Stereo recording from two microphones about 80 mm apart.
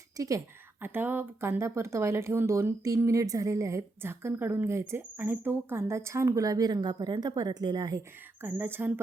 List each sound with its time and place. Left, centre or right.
0.2 s a woman's voice: right
0.8 s speech: right
1.5 s speech: right
6.4 s a woman's voice: right
8.4 s speech: right